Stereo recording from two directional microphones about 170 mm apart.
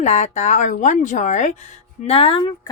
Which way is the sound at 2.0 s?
35° left (ahead or behind).